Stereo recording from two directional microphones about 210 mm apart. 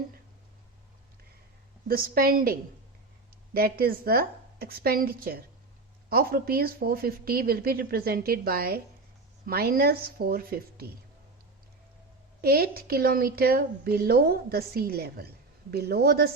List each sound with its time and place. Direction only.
1.9 s a woman's voice: 45° right (ahead or behind)
12.4 s a woman's voice: 45° right (ahead or behind)